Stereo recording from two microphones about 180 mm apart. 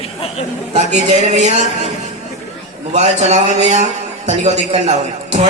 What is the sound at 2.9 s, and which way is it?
A man's voice, 40° right (ahead or behind).